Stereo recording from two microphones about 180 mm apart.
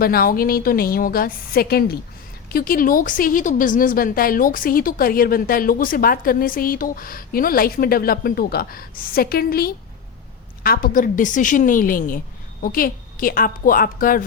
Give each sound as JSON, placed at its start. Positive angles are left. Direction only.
{"t": 0.0, "sound": "a woman's voice", "side_deg": 55}